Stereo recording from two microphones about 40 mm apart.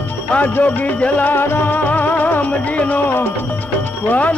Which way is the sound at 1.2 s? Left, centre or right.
Left.